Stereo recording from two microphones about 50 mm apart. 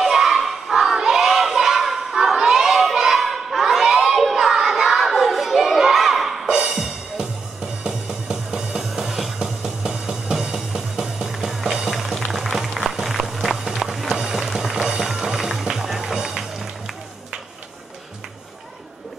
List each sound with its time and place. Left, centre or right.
0.0 s crowd: centre
6.4 s music: centre
13.0 s run: centre